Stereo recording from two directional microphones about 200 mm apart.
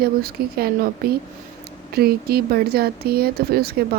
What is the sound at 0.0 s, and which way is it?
Speech, 50° right (ahead or behind).